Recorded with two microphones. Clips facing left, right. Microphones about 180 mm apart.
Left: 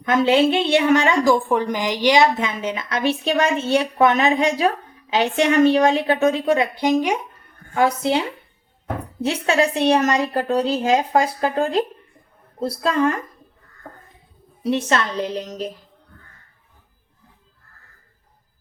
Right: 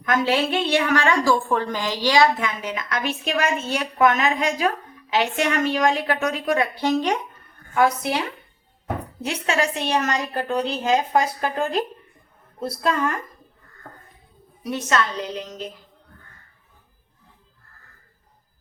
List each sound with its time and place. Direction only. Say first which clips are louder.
0.0 s a woman's voice: left 5 dB; 25° left (ahead or behind)
7.7 s a woman's voice: left 2 dB; 25° left (ahead or behind)
9.2 s a woman's voice: left 5 dB; 35° left (ahead or behind)
14.6 s a woman's voice: left 3 dB; 30° left (ahead or behind)